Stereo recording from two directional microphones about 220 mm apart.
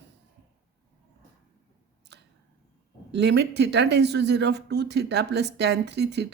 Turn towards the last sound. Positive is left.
turn(degrees=-50)  # may be behind; listen again after turning